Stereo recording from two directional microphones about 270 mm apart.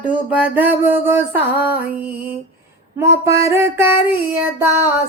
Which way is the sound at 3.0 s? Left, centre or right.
Centre.